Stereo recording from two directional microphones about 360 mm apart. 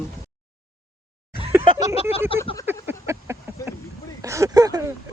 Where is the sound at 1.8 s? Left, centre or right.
Centre.